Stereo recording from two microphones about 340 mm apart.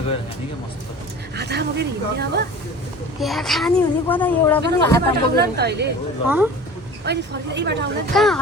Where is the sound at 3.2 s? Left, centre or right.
Centre.